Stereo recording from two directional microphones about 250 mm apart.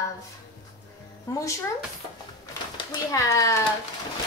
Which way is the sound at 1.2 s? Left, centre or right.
Centre.